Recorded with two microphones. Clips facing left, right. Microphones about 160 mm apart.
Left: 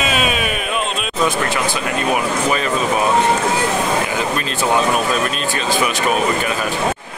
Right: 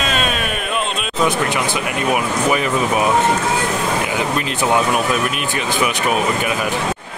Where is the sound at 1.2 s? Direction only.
20° right (ahead or behind).